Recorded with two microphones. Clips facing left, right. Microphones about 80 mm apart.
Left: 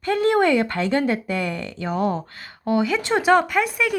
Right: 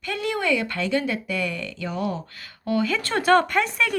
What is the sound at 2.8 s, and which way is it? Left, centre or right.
Speech, centre.